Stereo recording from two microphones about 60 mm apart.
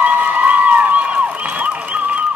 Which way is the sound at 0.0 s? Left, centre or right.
Right.